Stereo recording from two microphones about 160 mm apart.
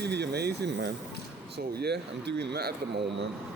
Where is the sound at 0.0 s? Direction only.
90° right.